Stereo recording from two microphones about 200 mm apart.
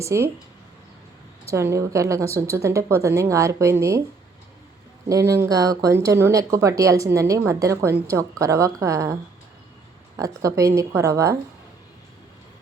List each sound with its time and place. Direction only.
0.0 s speech: 15° right (ahead or behind)
1.5 s speech: 15° right (ahead or behind)
5.0 s speech: 15° right (ahead or behind)
10.2 s speech: 15° right (ahead or behind)